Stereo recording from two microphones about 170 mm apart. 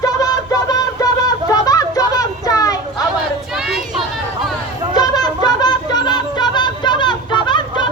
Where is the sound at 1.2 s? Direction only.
20° left (ahead or behind).